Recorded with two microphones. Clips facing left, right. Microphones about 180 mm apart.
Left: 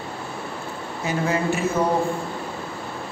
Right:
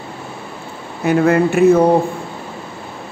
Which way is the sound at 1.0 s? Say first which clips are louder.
Right 10 dB; 60° right (ahead or behind).